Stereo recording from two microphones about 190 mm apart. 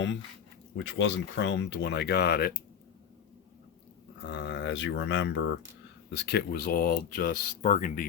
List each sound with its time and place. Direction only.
0.8 s speech: 70° left (ahead or behind)
4.2 s speech: 65° left (ahead or behind); by 8.0 s 40° left (ahead or behind)